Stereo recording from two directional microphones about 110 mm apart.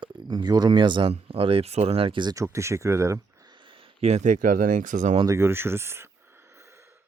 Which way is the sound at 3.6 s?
75° right (ahead or behind).